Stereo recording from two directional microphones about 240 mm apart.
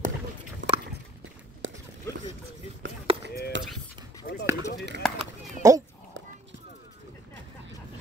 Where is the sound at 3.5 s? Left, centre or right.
Right.